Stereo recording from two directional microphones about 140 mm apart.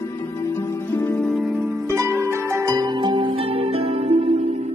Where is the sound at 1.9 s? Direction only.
20° right (ahead or behind); by 4.5 s 45° right (ahead or behind).